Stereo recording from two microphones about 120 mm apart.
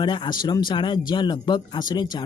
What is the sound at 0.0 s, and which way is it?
Speech, 40° left (ahead or behind).